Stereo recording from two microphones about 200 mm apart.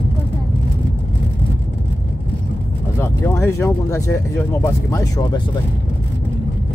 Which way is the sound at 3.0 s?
15° left (ahead or behind).